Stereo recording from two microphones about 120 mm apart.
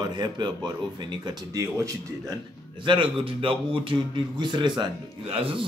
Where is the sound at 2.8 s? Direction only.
45° right (ahead or behind).